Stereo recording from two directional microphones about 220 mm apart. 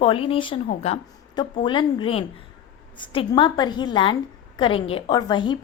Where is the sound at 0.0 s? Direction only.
25° left (ahead or behind).